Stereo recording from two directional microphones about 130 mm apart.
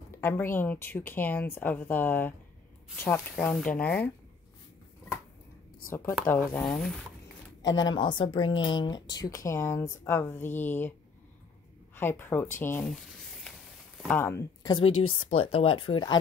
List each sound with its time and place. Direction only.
0.2 s a woman's voice: 20° left (ahead or behind)
6.2 s a woman's voice: 15° left (ahead or behind)
7.9 s a woman's voice: 40° left (ahead or behind); by 12.8 s 20° left (ahead or behind)
12.8 s speech: 5° left (ahead or behind)
14.0 s speech: 15° left (ahead or behind)
14.7 s speech: 45° left (ahead or behind)